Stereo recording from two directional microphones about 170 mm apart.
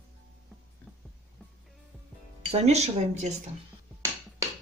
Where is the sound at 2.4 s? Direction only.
40° right (ahead or behind).